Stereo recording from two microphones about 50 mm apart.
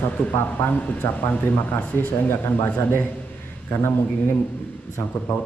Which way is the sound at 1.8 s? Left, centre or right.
Left.